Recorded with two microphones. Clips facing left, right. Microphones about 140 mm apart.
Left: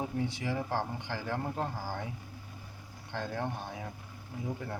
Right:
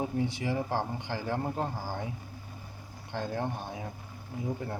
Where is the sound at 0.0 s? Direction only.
20° right (ahead or behind).